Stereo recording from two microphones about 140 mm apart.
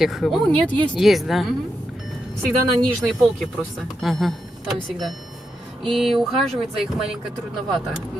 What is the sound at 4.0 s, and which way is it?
Speech, centre (ahead or behind).